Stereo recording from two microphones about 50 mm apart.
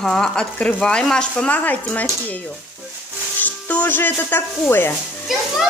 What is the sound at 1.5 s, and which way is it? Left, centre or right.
Speech, left.